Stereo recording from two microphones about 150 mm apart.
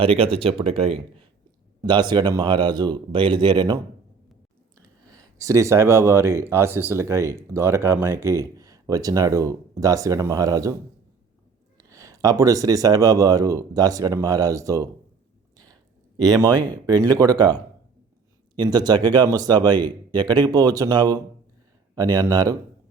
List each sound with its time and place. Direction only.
0.0 s speech: 40° right (ahead or behind)
1.8 s speech: 30° right (ahead or behind)
5.0 s speech: 25° right (ahead or behind)
11.8 s speech: 20° right (ahead or behind)
15.5 s a sound: 25° right (ahead or behind)
16.8 s speech: 25° right (ahead or behind)
18.5 s speech: 30° right (ahead or behind)